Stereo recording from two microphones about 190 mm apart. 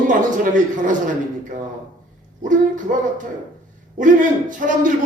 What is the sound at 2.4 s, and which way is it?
Speech, 45° right (ahead or behind).